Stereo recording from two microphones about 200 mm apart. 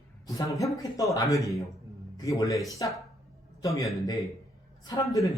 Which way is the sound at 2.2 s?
15° left (ahead or behind).